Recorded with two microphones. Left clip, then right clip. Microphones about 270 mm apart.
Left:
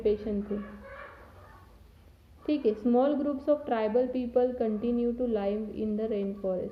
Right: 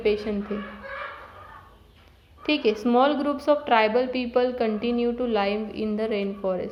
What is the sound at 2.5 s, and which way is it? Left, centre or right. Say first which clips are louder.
A woman's voice: right 5 dB; centre.